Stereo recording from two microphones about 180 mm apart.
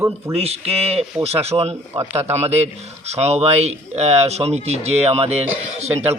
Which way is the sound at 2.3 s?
35° right (ahead or behind).